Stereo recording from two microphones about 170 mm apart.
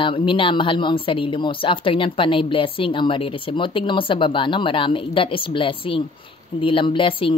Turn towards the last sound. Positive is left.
turn(degrees=30)  # may be behind; listen again after turning